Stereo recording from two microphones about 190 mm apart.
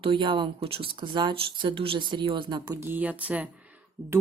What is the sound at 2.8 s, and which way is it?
Speech, 10° right (ahead or behind).